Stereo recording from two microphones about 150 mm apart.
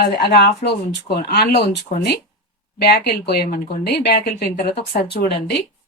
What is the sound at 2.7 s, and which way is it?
Speech, 90° left.